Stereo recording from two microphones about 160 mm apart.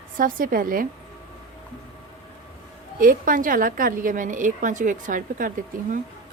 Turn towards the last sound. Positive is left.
turn(degrees=-60)  # may be behind; listen again after turning